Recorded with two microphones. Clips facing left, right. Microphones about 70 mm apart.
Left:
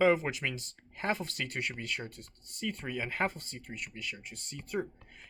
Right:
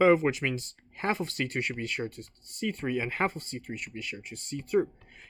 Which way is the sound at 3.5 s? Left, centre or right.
Right.